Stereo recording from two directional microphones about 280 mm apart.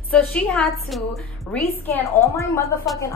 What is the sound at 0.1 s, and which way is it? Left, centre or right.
A woman's voice, centre.